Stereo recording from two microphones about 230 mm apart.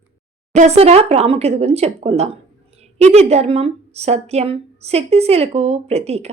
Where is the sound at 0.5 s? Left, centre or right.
Right.